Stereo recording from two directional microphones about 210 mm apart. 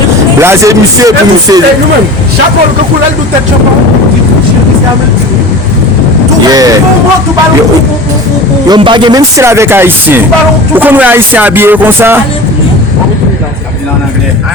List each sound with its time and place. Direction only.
0.3 s speech: 10° right (ahead or behind)
6.5 s speech: 15° right (ahead or behind)
8.6 s speech: 20° right (ahead or behind)